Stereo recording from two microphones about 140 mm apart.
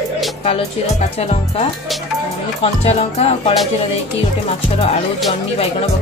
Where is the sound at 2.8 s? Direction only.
45° left (ahead or behind).